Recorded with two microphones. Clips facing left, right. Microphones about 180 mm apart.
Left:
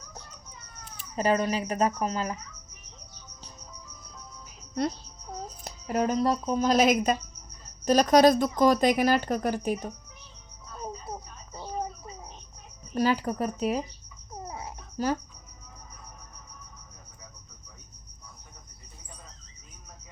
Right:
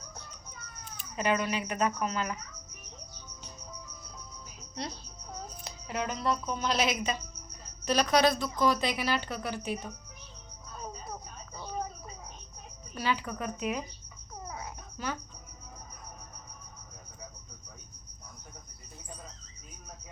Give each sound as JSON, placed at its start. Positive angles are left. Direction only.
{"t": 0.9, "sound": "a child's voice", "side_deg": 35}
{"t": 5.6, "sound": "a woman's voice", "side_deg": 45}
{"t": 12.9, "sound": "a child's voice", "side_deg": 40}
{"t": 14.4, "sound": "babbling", "side_deg": 25}